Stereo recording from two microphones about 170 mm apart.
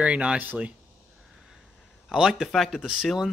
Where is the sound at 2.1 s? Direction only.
Centre (ahead or behind).